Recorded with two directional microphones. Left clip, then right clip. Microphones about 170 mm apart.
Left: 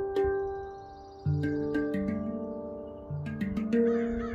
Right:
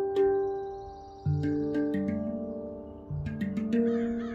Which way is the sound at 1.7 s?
15° left (ahead or behind).